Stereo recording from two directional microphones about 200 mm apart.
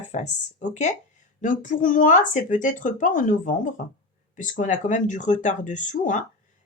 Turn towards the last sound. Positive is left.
turn(degrees=40)  # may be behind; listen again after turning